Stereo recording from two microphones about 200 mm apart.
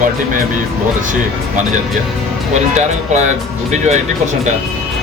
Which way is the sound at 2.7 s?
35° right (ahead or behind).